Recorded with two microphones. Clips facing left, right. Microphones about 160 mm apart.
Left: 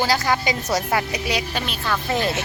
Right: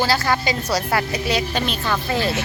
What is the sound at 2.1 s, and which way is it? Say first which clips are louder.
Speech: even; 20° left (ahead or behind).